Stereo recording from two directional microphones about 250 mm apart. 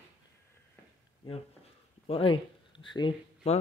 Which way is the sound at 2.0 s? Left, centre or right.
Left.